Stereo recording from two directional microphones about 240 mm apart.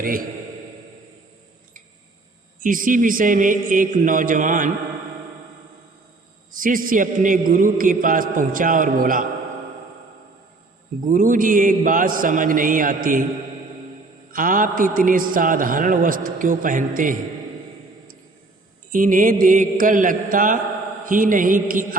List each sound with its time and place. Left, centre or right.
0.0 s a man's voice: right
2.6 s a man's voice: right
6.5 s a man's voice: right
11.1 s a man's voice: right
14.3 s a man's voice: right
18.9 s a man's voice: right